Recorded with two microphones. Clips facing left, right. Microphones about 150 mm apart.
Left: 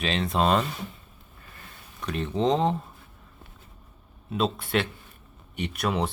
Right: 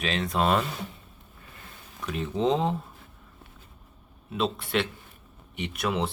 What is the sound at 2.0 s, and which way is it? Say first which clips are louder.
Speech: left 1 dB; 5° right (ahead or behind).